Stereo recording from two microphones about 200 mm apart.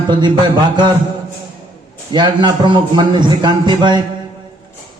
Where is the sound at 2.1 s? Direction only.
25° right (ahead or behind).